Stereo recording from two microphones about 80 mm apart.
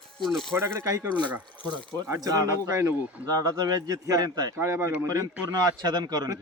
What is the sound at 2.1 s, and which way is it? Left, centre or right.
Speech, right.